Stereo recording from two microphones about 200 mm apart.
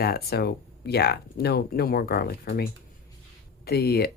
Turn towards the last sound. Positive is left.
turn(degrees=50)  # may be behind; listen again after turning